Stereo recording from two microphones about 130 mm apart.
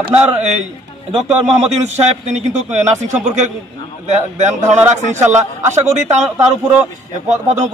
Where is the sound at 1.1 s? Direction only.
55° right (ahead or behind).